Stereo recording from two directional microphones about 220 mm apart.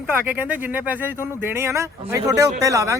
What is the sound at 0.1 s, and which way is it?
Speech, 5° right (ahead or behind).